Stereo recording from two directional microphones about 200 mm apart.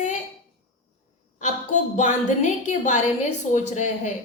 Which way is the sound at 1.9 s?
40° left (ahead or behind).